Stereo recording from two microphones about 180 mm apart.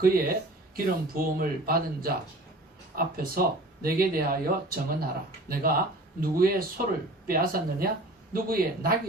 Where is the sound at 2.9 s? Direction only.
55° right (ahead or behind).